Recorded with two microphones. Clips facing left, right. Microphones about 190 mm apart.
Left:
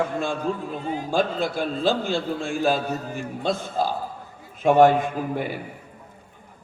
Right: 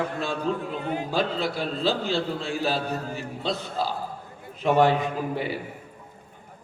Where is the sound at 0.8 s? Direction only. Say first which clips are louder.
Even; 60° right (ahead or behind).